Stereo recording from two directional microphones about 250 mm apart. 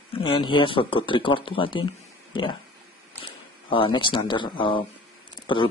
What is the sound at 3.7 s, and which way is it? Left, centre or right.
Speech, left.